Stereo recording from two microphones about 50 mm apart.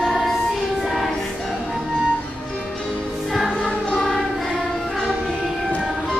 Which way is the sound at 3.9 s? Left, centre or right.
Centre.